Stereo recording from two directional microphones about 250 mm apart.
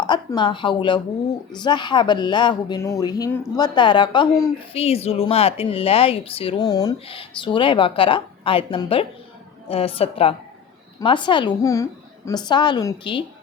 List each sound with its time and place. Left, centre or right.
0.0 s a woman's voice: centre